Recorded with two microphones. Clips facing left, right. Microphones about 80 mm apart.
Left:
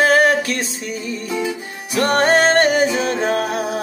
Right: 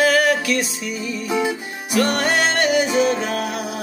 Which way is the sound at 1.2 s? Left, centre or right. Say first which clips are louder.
Right 3 dB; right.